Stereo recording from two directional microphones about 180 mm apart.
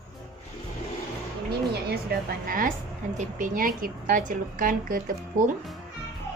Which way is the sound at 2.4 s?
50° right (ahead or behind).